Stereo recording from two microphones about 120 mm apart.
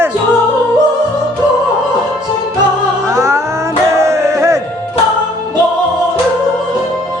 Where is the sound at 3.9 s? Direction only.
25° right (ahead or behind).